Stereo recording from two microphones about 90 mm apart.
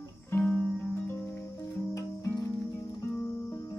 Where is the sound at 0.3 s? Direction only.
20° left (ahead or behind).